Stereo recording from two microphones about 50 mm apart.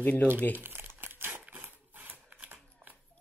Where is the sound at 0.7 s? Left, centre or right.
Right.